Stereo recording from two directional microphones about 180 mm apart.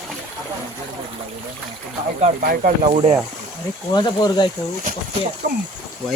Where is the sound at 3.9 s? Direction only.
25° left (ahead or behind).